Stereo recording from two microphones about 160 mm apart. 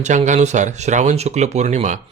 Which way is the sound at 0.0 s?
50° right (ahead or behind).